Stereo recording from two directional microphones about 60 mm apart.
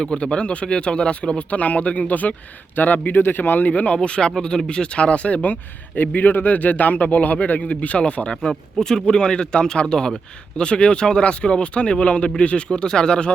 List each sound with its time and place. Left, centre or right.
0.0 s speech: centre
8.4 s speech: centre